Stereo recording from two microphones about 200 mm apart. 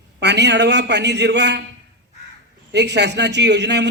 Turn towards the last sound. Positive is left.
turn(degrees=-60)  # may be behind; listen again after turning